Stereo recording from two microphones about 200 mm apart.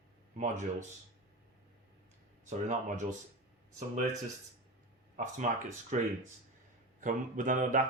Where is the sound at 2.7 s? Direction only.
40° right (ahead or behind).